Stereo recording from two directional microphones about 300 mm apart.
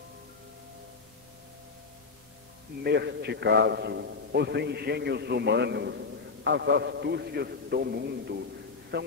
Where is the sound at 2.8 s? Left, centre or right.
Right.